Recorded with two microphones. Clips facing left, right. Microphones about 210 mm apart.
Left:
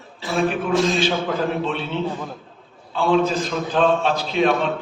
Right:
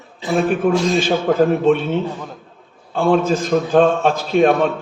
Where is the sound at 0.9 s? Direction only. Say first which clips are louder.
Right 6 dB; 45° right (ahead or behind).